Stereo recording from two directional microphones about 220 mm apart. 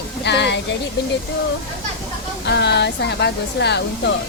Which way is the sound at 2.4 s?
50° left (ahead or behind).